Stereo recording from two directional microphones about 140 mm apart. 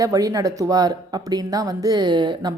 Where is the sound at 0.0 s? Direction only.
25° right (ahead or behind).